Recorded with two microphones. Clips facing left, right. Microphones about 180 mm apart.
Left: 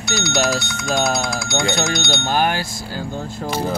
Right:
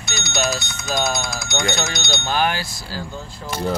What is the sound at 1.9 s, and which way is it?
Speech, 55° left (ahead or behind).